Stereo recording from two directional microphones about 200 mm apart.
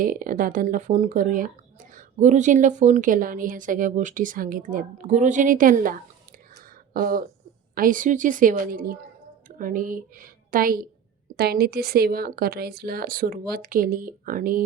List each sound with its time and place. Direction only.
0.0 s speech: 45° right (ahead or behind)